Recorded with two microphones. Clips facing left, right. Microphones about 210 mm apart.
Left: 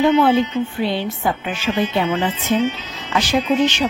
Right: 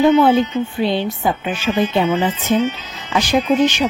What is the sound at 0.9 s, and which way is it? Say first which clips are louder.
A woman's voice: right 2 dB; 20° right (ahead or behind).